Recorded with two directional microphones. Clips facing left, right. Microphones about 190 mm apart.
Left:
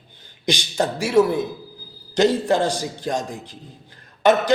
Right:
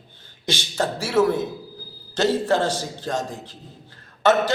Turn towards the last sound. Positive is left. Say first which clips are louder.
# left 2 dB
turn(degrees=15)  # may be behind; listen again after turning